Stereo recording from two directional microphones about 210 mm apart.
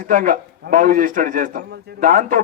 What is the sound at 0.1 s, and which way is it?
A man's voice, 40° right (ahead or behind).